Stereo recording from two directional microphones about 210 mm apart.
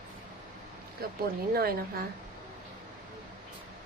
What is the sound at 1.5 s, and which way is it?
Speech, 45° right (ahead or behind).